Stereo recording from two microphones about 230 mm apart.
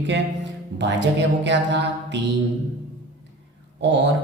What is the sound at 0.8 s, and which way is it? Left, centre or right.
Speech, right.